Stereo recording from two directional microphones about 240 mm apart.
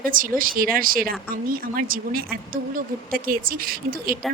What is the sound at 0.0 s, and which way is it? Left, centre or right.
Speech, right.